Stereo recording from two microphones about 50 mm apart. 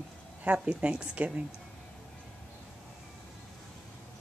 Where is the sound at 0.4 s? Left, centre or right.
Right.